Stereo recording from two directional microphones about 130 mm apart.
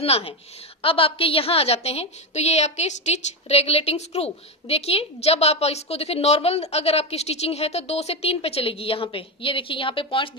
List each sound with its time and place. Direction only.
0.0 s a woman's voice: 50° left (ahead or behind)